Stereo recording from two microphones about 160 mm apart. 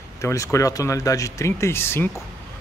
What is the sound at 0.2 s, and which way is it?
A man's voice, 20° left (ahead or behind).